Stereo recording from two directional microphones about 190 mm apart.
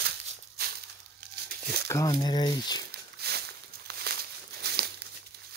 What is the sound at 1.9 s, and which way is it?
Speech, 20° left (ahead or behind).